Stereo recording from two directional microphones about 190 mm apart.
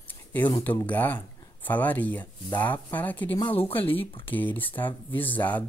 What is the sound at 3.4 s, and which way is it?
Speech, 30° left (ahead or behind).